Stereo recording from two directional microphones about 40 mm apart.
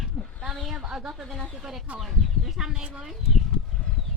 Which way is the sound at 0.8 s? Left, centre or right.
Centre.